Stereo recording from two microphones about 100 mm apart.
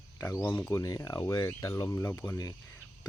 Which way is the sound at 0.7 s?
35° left (ahead or behind).